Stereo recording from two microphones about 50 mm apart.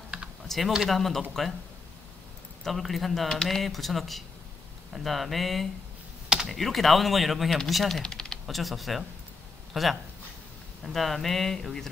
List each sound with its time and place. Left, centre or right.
0.5 s speech: centre
2.6 s speech: centre
6.2 s computer keyboard: centre
6.5 s speech: centre
8.0 s typing: centre
8.5 s speech: centre